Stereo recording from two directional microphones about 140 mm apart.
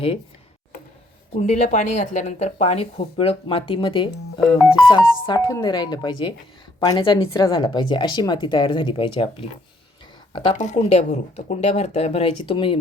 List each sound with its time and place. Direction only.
1.3 s a woman's voice: 50° left (ahead or behind)
10.5 s speech: 60° left (ahead or behind); by 12.8 s 40° left (ahead or behind)